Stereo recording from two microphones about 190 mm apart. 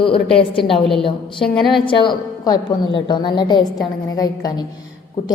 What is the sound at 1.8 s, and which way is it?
A woman's voice, 25° left (ahead or behind).